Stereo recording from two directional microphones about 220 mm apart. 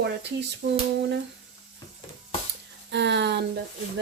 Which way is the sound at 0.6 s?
60° right (ahead or behind).